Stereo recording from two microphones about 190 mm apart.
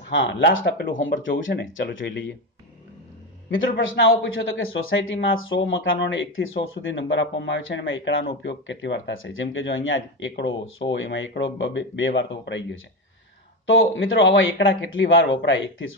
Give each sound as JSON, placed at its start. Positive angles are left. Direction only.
{"t": 0.1, "sound": "speech", "side_deg": 75}
{"t": 3.4, "sound": "a man's voice", "side_deg": 75}
{"t": 8.3, "sound": "speech", "side_deg": 70}
{"t": 13.7, "sound": "a man's voice", "side_deg": 90}